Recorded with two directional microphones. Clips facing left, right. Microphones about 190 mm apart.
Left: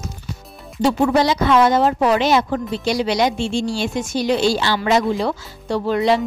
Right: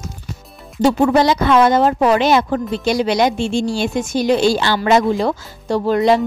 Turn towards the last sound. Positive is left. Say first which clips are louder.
# right 3 dB
turn(degrees=-45)  # may be behind; listen again after turning